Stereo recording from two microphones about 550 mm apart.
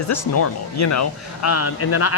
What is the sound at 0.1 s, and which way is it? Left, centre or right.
Speech, left.